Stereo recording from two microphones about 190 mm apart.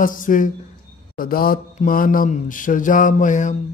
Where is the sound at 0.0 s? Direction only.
45° left (ahead or behind).